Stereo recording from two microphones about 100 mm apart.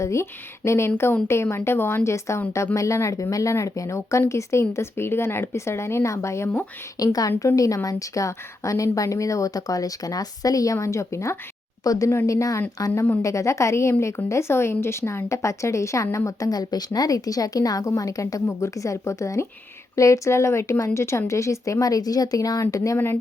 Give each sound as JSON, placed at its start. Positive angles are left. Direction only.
{"t": 0.0, "sound": "a woman's voice", "side_deg": 30}